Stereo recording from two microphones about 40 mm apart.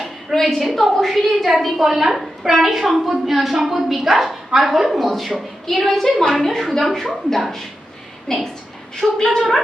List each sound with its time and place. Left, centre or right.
0.3 s a woman's voice: centre
8.3 s speech: centre